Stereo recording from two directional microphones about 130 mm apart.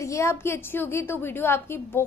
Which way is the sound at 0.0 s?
25° left (ahead or behind).